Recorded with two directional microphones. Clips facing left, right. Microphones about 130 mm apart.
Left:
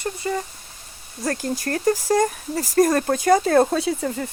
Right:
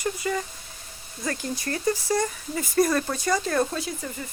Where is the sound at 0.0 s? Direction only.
30° left (ahead or behind).